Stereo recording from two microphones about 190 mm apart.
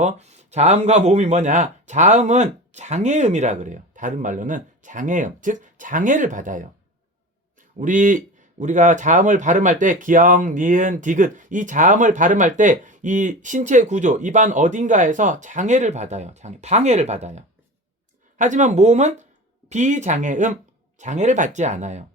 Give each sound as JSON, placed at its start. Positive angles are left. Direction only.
{"t": 0.0, "sound": "a man's voice", "side_deg": -35}
{"t": 7.8, "sound": "a man's voice", "side_deg": -45}